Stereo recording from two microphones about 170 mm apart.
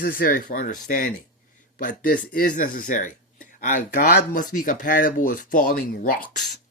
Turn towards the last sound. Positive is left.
turn(degrees=55)  # may be behind; listen again after turning